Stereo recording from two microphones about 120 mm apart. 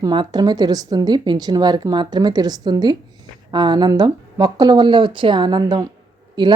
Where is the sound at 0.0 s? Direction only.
40° right (ahead or behind).